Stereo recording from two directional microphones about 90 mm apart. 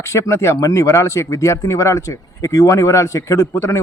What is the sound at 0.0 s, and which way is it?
Speech, 35° left (ahead or behind).